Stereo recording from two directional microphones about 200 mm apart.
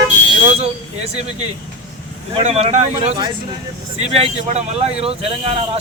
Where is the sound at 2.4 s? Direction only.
30° right (ahead or behind).